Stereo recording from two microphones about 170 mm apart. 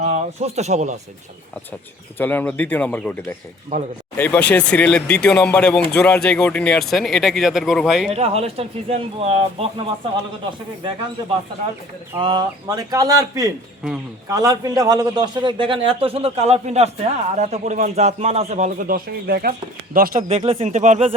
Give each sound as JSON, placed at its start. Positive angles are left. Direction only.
{"t": 0.0, "sound": "speech", "side_deg": -40}
{"t": 2.1, "sound": "speech", "side_deg": 10}
{"t": 8.1, "sound": "speech", "side_deg": -35}
{"t": 12.1, "sound": "a man's voice", "side_deg": -25}
{"t": 20.2, "sound": "speech", "side_deg": -35}